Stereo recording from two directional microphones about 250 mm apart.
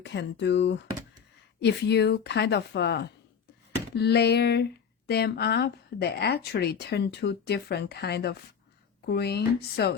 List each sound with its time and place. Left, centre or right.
0.0 s speech: left